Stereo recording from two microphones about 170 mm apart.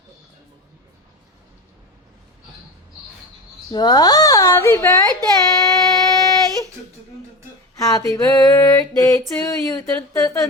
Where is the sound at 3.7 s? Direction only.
25° left (ahead or behind).